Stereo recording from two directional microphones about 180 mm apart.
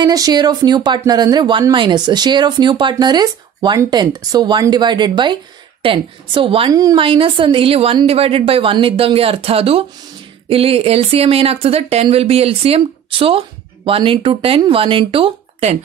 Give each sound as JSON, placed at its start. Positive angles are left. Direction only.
{"t": 0.0, "sound": "speech", "side_deg": -20}